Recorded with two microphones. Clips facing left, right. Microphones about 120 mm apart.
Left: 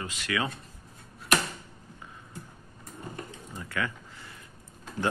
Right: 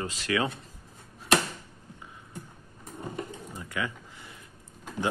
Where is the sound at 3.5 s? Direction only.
15° right (ahead or behind).